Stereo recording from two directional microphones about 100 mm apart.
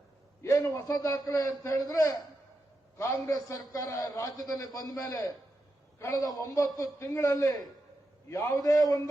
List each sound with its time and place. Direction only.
0.4 s a man's voice: 35° left (ahead or behind)
8.6 s a man's voice: 35° left (ahead or behind)